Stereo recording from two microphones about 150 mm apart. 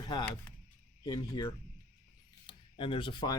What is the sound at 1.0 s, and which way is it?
Speech, 30° left (ahead or behind).